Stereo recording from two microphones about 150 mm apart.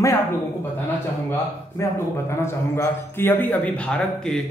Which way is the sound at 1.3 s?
20° left (ahead or behind).